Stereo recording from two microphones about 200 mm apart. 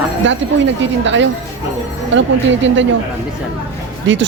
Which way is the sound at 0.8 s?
65° right (ahead or behind).